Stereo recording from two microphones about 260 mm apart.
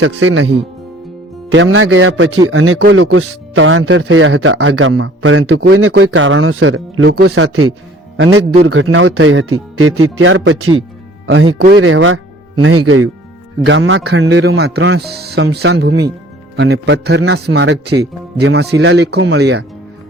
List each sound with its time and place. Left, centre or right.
0.0 s speech: right
1.5 s speech: right
5.6 s speech: right
11.5 s speech: right
11.8 s speech: right
13.7 s speech: right